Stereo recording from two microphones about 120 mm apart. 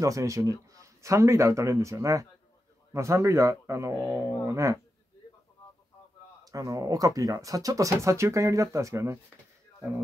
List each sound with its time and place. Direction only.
0.0 s speech: 25° right (ahead or behind)
6.4 s speech: 30° right (ahead or behind)